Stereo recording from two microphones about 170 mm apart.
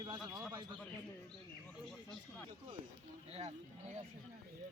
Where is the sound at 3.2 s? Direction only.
35° right (ahead or behind).